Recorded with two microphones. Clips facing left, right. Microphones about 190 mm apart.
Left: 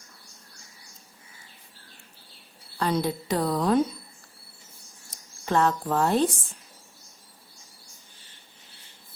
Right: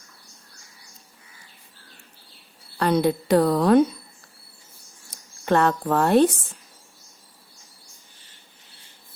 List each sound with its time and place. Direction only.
2.7 s a woman's voice: 65° right (ahead or behind)
5.5 s a woman's voice: 65° right (ahead or behind)